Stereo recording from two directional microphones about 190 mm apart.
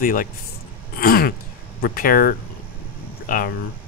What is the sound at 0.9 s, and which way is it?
Throat clearing, 50° left (ahead or behind).